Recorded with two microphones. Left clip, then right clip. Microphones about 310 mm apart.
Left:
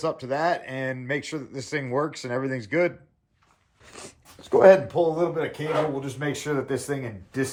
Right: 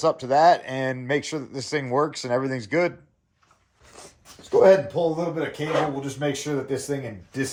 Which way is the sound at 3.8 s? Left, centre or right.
Left.